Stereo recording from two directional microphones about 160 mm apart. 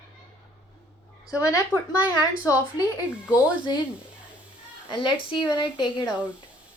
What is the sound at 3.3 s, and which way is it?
Speech, 25° left (ahead or behind).